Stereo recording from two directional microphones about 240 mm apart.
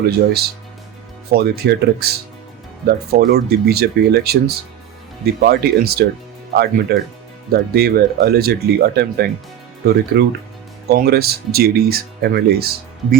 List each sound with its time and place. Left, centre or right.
1.3 s speech: right